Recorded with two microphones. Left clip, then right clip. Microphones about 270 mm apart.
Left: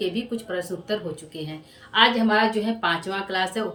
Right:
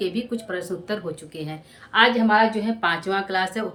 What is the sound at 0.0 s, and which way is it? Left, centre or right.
Speech, centre.